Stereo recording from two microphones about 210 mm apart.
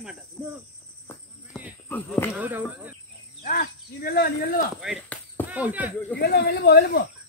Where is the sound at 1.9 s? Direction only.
10° left (ahead or behind).